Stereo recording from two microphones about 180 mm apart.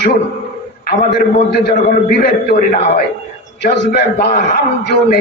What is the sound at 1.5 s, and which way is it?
A man's voice, 65° left (ahead or behind).